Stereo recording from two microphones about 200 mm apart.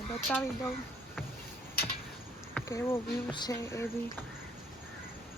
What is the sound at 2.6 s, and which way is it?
Speech, 15° left (ahead or behind).